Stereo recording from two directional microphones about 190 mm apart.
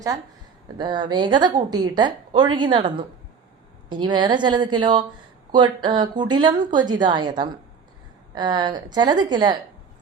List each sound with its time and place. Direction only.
0.8 s a woman's voice: 25° right (ahead or behind)
3.8 s a woman's voice: 25° right (ahead or behind)